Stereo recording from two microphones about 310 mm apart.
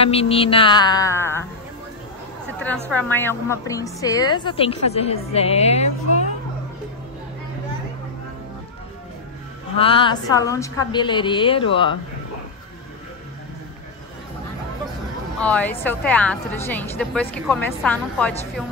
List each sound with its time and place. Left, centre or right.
0.0 s a woman's voice: centre
2.6 s a woman's voice: centre; by 6.2 s left
9.8 s a woman's voice: centre
15.4 s a woman's voice: centre